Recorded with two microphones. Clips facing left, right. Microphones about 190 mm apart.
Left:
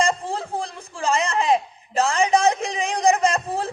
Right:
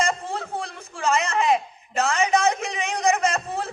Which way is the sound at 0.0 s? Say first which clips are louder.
Left 3 dB; 30° left (ahead or behind).